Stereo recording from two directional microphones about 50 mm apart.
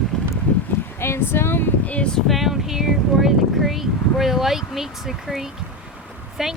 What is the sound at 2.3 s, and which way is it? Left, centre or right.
Speech, centre.